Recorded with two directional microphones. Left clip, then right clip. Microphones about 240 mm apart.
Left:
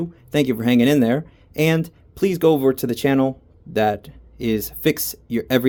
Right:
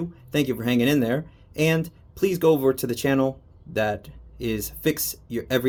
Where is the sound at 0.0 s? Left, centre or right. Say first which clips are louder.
Left 5 dB; left.